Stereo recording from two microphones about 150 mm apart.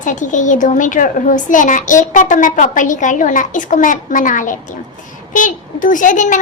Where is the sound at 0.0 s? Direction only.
55° left (ahead or behind).